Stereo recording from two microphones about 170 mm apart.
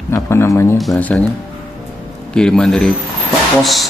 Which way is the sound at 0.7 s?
5° left (ahead or behind).